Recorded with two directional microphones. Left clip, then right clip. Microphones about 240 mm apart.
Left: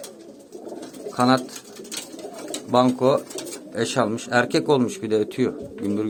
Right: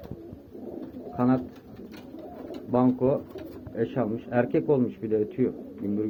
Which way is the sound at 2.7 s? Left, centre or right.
Centre.